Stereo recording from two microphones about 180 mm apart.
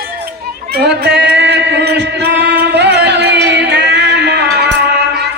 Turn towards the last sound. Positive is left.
turn(degrees=-70)  # may be behind; listen again after turning